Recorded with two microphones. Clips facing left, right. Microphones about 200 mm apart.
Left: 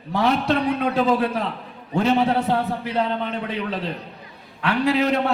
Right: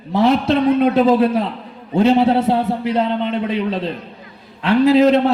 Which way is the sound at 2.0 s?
25° right (ahead or behind).